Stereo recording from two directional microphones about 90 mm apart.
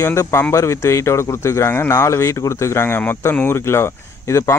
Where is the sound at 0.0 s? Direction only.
30° left (ahead or behind).